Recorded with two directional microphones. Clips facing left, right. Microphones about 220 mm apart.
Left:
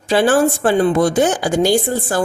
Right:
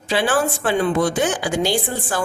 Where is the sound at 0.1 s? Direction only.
45° left (ahead or behind).